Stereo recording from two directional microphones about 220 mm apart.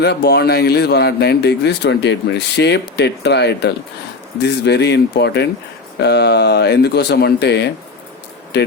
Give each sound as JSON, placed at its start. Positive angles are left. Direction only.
{"t": 0.0, "sound": "a man's voice", "side_deg": 50}